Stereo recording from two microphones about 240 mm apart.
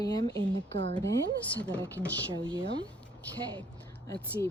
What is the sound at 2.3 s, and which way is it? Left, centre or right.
Speech, centre.